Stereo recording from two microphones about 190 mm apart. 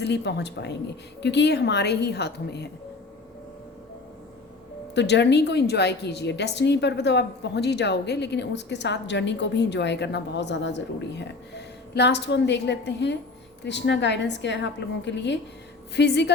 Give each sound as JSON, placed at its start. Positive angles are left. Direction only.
{"t": 0.0, "sound": "a woman's voice", "side_deg": 65}
{"t": 4.9, "sound": "a woman's voice", "side_deg": 65}